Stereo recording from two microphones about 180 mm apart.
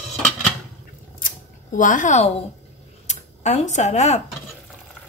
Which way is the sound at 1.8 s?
45° left (ahead or behind).